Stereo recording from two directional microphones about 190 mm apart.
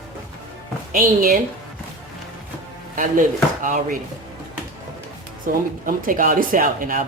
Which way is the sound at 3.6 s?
45° right (ahead or behind).